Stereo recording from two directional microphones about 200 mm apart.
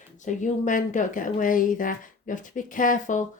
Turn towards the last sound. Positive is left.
turn(degrees=40)  # may be behind; listen again after turning